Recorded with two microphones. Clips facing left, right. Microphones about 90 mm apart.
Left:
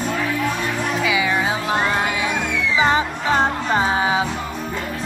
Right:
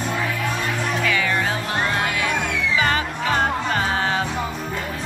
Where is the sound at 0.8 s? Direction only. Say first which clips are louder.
Left 2 dB; 5° left (ahead or behind).